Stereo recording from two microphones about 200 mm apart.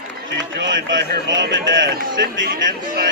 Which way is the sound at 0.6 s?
65° right (ahead or behind).